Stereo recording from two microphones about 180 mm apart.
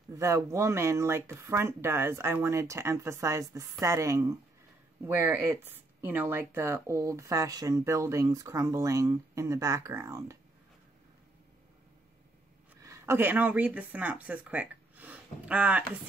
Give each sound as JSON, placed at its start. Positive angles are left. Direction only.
{"t": 0.1, "sound": "speech", "side_deg": -15}
{"t": 12.8, "sound": "speech", "side_deg": -15}